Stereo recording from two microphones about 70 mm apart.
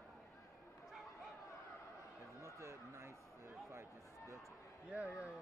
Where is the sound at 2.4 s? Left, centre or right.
Right.